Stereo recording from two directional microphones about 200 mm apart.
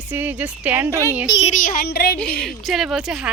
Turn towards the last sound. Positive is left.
turn(degrees=-5)  # may be behind; listen again after turning